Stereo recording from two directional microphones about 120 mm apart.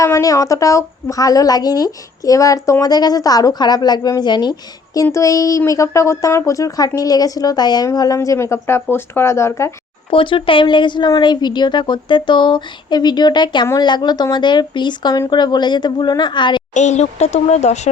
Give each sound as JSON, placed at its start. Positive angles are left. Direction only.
{"t": 0.0, "sound": "a woman's voice", "side_deg": 25}
{"t": 5.0, "sound": "speech", "side_deg": 25}
{"t": 10.1, "sound": "a woman's voice", "side_deg": 45}
{"t": 16.7, "sound": "speech", "side_deg": 75}